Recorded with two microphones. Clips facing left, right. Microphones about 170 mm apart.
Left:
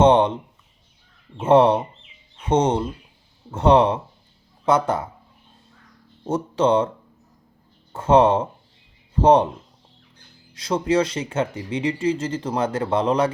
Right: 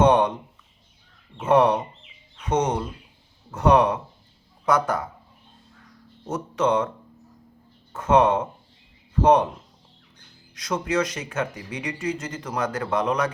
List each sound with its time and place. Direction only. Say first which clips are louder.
0.0 s speech: left 3 dB; 25° left (ahead or behind)
1.4 s speech: left 3 dB; 25° left (ahead or behind)
6.2 s speech: left 4 dB; 30° left (ahead or behind)
7.9 s speech: left 3 dB; 30° left (ahead or behind)
10.5 s speech: left 5 dB; 30° left (ahead or behind)